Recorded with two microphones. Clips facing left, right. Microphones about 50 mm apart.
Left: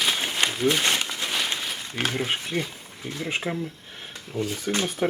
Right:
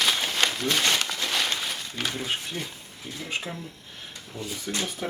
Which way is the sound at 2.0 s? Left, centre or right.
Left.